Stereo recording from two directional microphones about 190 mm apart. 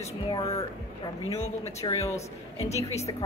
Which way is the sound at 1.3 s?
35° left (ahead or behind).